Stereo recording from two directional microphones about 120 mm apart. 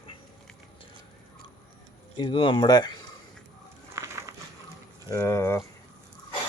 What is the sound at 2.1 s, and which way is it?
Speech, 40° left (ahead or behind).